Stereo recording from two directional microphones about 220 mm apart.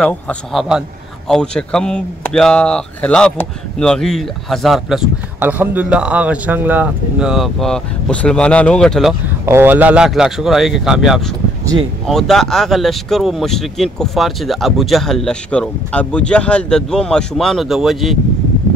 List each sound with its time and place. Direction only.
0.0 s a man's voice: 5° left (ahead or behind)
9.5 s a man's voice: 10° right (ahead or behind)